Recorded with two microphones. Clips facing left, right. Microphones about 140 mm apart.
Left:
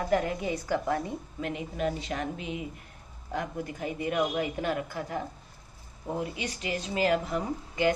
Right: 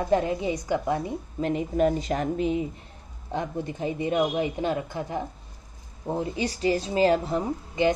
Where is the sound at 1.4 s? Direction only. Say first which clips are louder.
Right 9 dB; 35° right (ahead or behind).